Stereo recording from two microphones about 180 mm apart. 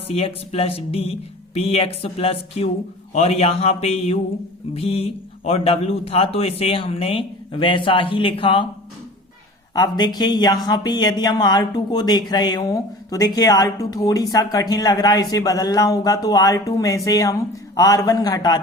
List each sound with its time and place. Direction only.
0.1 s a man's voice: 35° left (ahead or behind)
9.7 s speech: 25° left (ahead or behind)